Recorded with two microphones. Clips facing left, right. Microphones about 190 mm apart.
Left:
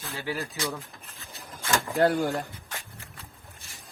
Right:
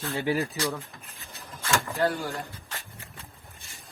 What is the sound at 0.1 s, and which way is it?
Speech, 15° right (ahead or behind).